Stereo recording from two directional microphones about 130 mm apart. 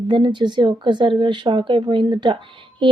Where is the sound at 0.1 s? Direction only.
35° right (ahead or behind).